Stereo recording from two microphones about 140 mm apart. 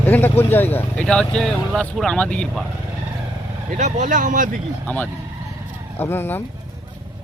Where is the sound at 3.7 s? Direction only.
55° right (ahead or behind).